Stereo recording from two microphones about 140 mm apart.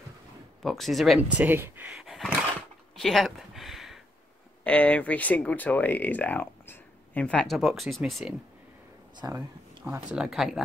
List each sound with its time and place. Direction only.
0.6 s speech: centre (ahead or behind)
1.4 s speech: 15° right (ahead or behind)
3.0 s a sound: centre (ahead or behind)
4.6 s speech: 10° left (ahead or behind)
9.2 s speech: 20° right (ahead or behind)
9.8 s speech: 5° right (ahead or behind)